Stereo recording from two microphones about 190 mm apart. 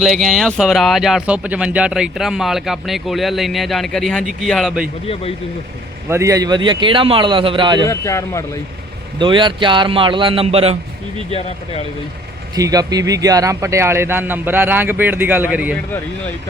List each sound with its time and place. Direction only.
0.0 s speech: centre (ahead or behind)
6.1 s a man's voice: 15° right (ahead or behind)
7.9 s speech: 15° left (ahead or behind)
9.1 s a man's voice: 25° right (ahead or behind)
11.3 s speech: 30° left (ahead or behind)
12.5 s a man's voice: 20° right (ahead or behind)